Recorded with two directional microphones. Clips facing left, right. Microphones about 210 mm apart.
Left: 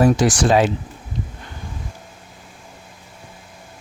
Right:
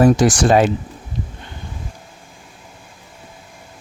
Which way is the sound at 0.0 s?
45° right (ahead or behind).